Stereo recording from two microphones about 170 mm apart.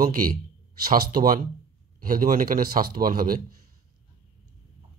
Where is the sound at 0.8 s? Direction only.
55° right (ahead or behind).